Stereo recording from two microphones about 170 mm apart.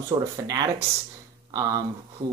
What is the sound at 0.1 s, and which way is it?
Speech, 25° right (ahead or behind).